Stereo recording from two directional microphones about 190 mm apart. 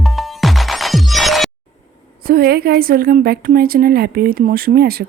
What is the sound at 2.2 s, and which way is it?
A woman's voice, 50° right (ahead or behind).